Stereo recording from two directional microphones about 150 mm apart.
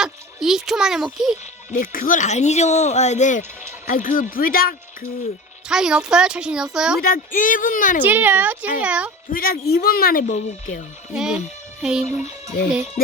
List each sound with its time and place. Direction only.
0.0 s a child's voice: 5° right (ahead or behind)
1.7 s speech: 65° left (ahead or behind)
5.6 s a child's voice: 5° right (ahead or behind)
7.3 s speech: 60° left (ahead or behind)
8.0 s a woman's voice: 10° right (ahead or behind)
9.3 s speech: 80° left; by 10.8 s 55° left (ahead or behind)
11.1 s music: 5° right (ahead or behind)